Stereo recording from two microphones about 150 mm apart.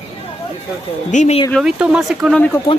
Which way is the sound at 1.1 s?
50° left (ahead or behind).